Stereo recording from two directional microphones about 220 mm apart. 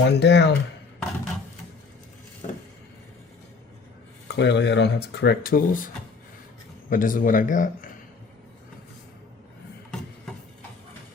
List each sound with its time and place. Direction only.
0.0 s speech: 50° left (ahead or behind)
2.4 s a sound: 30° left (ahead or behind)
4.3 s speech: 50° left (ahead or behind)
6.9 s speech: 40° left (ahead or behind)